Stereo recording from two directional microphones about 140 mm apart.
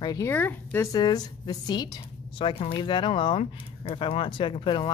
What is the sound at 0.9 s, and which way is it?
A woman's voice, 30° left (ahead or behind).